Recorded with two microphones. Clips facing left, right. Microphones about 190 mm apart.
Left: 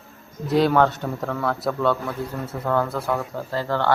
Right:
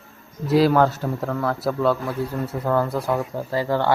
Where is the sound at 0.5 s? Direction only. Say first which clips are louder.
Right 1 dB; 5° right (ahead or behind).